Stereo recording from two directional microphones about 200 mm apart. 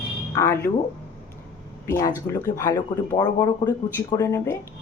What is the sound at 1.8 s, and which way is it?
Speech, 15° left (ahead or behind).